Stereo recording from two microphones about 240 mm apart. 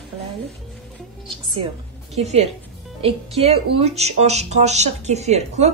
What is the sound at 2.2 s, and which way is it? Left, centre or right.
Speech, right.